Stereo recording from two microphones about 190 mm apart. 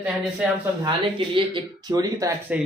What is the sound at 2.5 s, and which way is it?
Speech, 5° right (ahead or behind).